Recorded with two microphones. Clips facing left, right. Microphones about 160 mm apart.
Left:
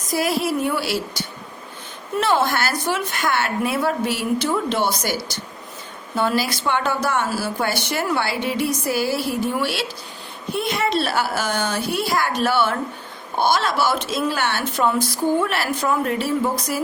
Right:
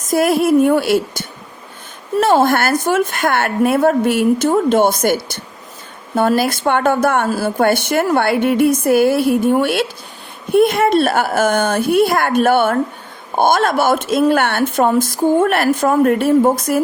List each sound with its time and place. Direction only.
0.1 s a woman's voice: 50° right (ahead or behind)